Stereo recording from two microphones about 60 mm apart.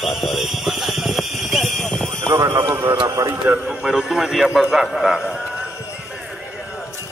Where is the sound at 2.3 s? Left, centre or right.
Right.